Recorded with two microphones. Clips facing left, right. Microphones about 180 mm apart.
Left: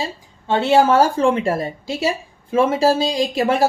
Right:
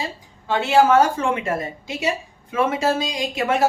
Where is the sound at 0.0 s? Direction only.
30° left (ahead or behind).